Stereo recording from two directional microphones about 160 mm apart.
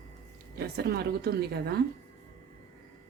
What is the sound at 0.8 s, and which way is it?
Speech, 80° right.